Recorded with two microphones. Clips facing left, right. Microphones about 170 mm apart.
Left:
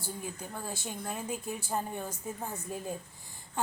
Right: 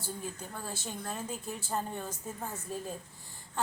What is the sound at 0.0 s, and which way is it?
A woman's voice, 15° left (ahead or behind).